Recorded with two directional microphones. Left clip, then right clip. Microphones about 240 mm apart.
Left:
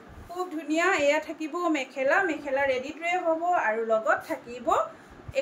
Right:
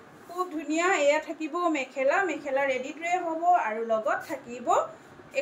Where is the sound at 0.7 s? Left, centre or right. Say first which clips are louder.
Even; centre.